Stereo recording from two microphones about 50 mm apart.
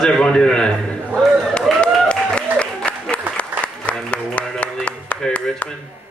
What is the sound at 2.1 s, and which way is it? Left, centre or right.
Applause, left.